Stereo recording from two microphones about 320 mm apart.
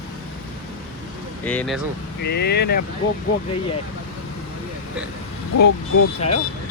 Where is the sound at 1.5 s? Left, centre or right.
Centre.